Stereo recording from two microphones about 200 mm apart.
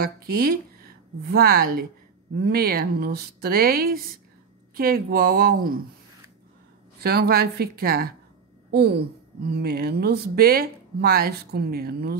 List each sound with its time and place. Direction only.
0.0 s speech: 50° right (ahead or behind)
7.0 s speech: 50° right (ahead or behind)